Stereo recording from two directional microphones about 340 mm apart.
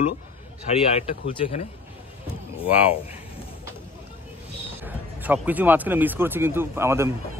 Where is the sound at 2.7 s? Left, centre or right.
Centre.